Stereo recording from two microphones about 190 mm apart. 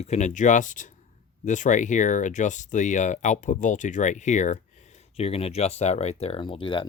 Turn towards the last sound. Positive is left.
turn(degrees=25)  # may be behind; listen again after turning